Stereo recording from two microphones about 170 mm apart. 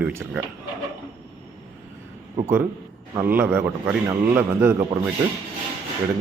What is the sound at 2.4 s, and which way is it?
Speech, 15° right (ahead or behind).